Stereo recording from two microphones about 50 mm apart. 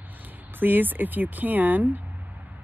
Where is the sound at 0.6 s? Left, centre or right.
Right.